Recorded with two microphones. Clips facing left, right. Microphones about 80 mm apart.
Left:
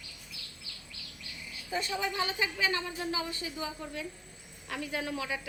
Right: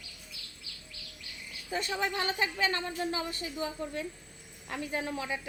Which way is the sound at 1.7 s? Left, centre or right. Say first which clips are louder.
Right 1 dB; right.